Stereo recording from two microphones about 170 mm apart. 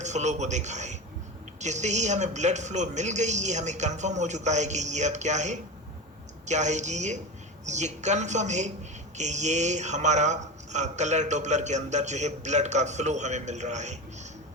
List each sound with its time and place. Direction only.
0.0 s a man's voice: 45° right (ahead or behind)